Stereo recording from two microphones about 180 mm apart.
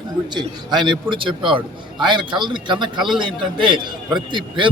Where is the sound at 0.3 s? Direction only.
25° right (ahead or behind).